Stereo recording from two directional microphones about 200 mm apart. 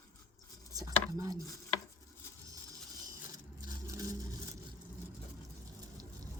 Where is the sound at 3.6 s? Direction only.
15° right (ahead or behind).